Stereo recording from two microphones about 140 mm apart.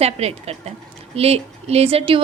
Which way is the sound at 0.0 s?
45° right (ahead or behind).